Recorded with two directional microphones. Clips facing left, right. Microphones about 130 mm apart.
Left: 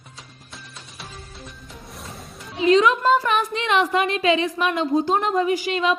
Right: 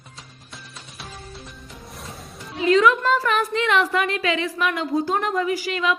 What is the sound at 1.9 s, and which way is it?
Music, centre (ahead or behind).